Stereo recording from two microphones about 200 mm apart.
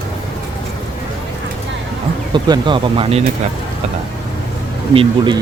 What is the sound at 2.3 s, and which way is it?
Speech, 25° right (ahead or behind).